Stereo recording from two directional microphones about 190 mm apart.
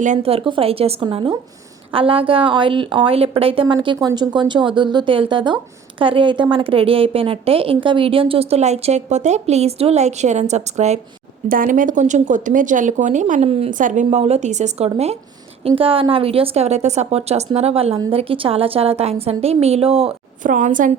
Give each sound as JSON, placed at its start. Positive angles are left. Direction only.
{"t": 0.0, "sound": "a woman's voice", "side_deg": -35}
{"t": 11.4, "sound": "a woman's voice", "side_deg": -45}
{"t": 20.4, "sound": "a woman's voice", "side_deg": -40}